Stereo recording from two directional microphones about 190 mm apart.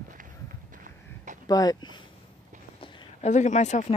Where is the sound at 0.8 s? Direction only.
40° right (ahead or behind).